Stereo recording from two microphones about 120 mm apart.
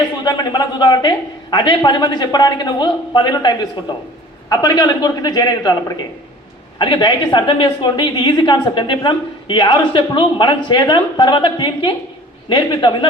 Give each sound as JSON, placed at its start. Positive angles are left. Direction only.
{"t": 0.3, "sound": "a woman's voice", "side_deg": 35}
{"t": 6.7, "sound": "a woman's voice", "side_deg": 40}